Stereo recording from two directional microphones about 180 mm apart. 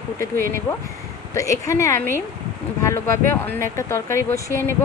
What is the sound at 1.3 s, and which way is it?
Speech, 15° left (ahead or behind).